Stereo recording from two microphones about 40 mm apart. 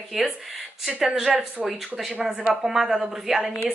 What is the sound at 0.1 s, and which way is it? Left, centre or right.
A woman's voice, centre.